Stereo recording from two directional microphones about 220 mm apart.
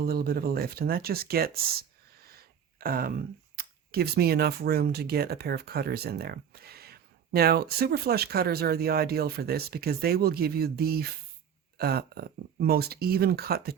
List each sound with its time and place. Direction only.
0.0 s speech: 45° right (ahead or behind)
2.2 s a sound: 45° right (ahead or behind)
3.6 s speech: 45° right (ahead or behind)